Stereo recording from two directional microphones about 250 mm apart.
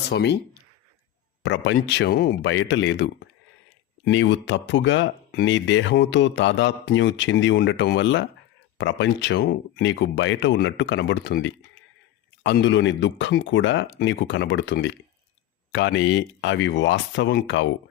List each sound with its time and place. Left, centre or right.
0.1 s speech: left